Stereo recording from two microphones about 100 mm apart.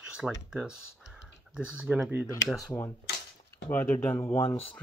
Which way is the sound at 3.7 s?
20° left (ahead or behind).